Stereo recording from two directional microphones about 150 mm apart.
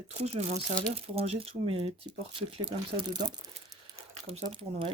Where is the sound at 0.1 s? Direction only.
45° right (ahead or behind); by 3.3 s 30° right (ahead or behind).